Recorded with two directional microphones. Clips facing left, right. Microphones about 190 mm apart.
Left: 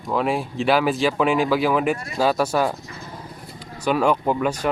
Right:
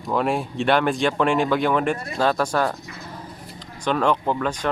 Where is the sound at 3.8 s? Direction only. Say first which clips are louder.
Left 2 dB; 10° left (ahead or behind).